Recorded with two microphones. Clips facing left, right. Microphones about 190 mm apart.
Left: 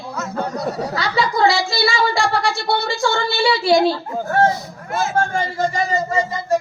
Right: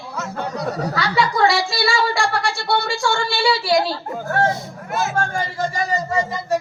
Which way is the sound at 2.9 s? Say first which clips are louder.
Left 1 dB; 20° left (ahead or behind).